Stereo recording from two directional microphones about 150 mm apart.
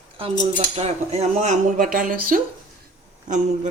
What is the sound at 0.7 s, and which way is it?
Speech, 45° right (ahead or behind).